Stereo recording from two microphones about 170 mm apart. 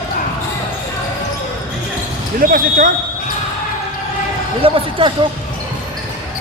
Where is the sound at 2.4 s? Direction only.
55° right (ahead or behind).